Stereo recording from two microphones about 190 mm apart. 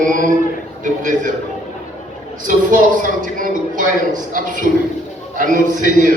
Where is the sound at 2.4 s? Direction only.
45° right (ahead or behind).